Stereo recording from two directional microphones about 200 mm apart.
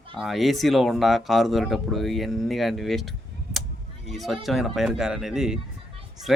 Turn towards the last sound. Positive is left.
turn(degrees=0)  # may be behind; listen again after turning